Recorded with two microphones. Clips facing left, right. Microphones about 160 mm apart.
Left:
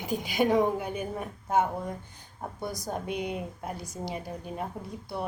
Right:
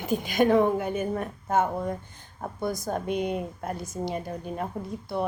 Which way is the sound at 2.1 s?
50° right (ahead or behind).